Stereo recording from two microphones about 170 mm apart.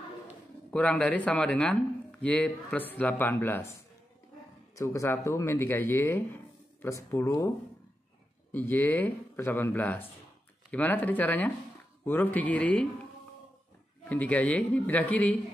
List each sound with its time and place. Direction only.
0.7 s a man's voice: 5° left (ahead or behind)
4.7 s a man's voice: 15° left (ahead or behind)
14.0 s a man's voice: 10° left (ahead or behind)